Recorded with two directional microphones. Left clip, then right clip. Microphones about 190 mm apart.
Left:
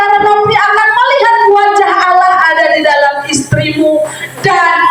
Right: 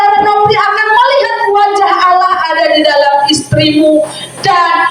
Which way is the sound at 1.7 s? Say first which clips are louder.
Even; 10° left (ahead or behind).